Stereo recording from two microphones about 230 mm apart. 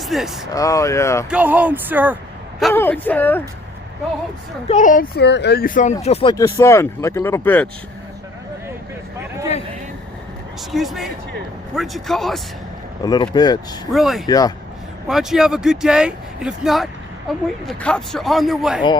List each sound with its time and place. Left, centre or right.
0.0 s speech: centre
0.5 s speech: centre
1.3 s speech: centre
2.6 s speech: centre
4.7 s speech: left
6.3 s speech: centre
10.7 s speech: centre
13.0 s speech: centre
13.9 s speech: centre
14.3 s speech: centre
15.0 s speech: centre